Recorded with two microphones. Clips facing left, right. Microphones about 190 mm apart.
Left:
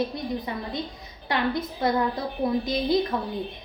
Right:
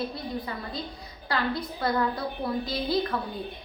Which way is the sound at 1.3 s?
20° left (ahead or behind).